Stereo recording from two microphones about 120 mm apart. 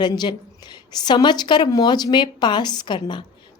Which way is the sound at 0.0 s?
40° left (ahead or behind).